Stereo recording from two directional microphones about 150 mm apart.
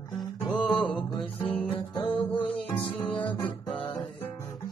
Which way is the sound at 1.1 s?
35° left (ahead or behind).